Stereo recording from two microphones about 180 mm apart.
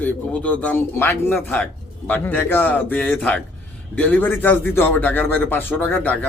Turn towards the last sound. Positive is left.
turn(degrees=10)  # may be behind; listen again after turning